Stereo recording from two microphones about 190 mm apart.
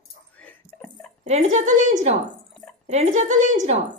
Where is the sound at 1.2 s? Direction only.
35° right (ahead or behind).